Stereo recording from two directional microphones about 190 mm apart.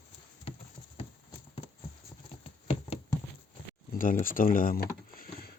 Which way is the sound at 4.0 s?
45° left (ahead or behind).